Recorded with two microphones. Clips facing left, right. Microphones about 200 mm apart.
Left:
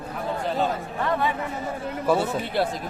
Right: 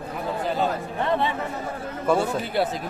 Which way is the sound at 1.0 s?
25° right (ahead or behind).